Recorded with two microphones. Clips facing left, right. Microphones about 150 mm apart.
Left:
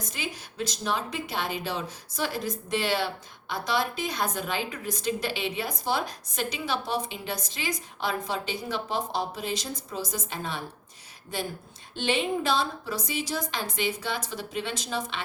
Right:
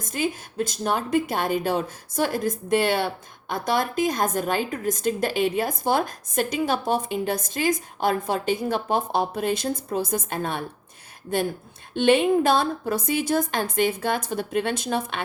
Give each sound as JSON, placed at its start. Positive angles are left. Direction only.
{"t": 0.0, "sound": "a woman's voice", "side_deg": -50}